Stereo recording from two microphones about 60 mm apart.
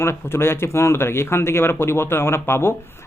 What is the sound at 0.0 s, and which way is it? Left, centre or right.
A man's voice, left.